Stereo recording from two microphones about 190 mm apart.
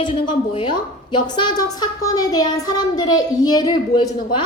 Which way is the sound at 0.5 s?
25° left (ahead or behind).